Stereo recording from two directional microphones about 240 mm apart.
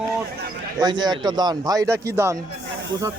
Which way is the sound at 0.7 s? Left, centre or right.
Centre.